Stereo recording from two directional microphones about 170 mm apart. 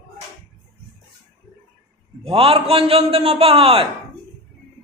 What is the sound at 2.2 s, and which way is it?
A man's voice, 35° right (ahead or behind).